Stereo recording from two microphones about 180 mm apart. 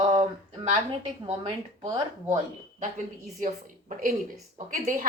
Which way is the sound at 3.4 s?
45° right (ahead or behind).